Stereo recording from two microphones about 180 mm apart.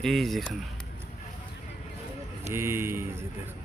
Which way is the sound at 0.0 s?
Centre (ahead or behind).